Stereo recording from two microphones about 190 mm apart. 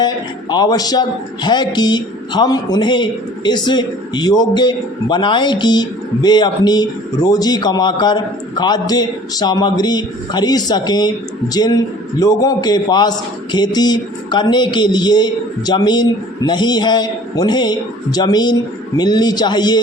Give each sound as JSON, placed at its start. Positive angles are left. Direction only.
{"t": 0.5, "sound": "a man's voice", "side_deg": 20}